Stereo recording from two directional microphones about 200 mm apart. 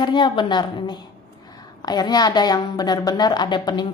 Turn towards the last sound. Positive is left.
turn(degrees=20)  # may be behind; listen again after turning